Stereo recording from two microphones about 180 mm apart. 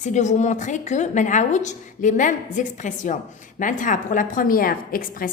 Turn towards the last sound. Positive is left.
turn(degrees=55)  # may be behind; listen again after turning